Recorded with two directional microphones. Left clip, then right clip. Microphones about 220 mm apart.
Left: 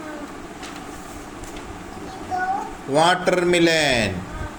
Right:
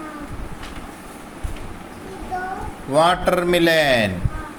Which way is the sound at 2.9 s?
20° right (ahead or behind).